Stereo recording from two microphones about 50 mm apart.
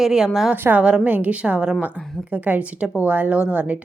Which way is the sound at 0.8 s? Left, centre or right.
Right.